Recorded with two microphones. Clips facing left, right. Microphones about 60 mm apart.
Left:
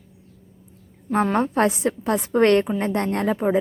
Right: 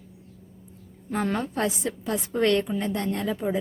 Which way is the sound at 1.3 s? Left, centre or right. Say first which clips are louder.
Left 7 dB; left.